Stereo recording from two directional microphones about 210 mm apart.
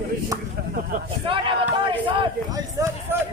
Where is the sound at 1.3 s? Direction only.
25° right (ahead or behind).